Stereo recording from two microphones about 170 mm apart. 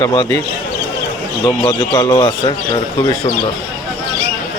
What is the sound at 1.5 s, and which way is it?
Speech, 25° left (ahead or behind).